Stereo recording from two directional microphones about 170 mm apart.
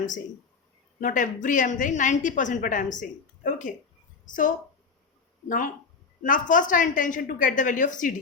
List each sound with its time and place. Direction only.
1.0 s a woman's voice: 50° left (ahead or behind)